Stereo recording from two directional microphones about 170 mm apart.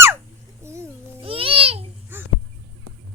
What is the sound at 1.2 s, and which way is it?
Babbling, 35° right (ahead or behind).